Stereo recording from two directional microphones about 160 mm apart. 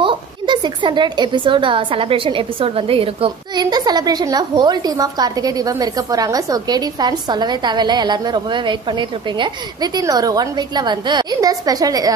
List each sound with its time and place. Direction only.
0.0 s a woman's voice: 30° right (ahead or behind)